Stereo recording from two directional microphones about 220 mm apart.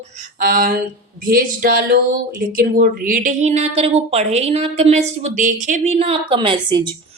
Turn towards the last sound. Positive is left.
turn(degrees=-20)  # may be behind; listen again after turning